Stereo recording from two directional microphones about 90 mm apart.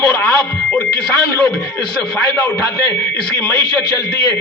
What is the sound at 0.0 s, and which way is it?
Radio, 15° left (ahead or behind).